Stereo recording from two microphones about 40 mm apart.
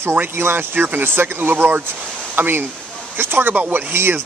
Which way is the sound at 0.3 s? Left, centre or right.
Right.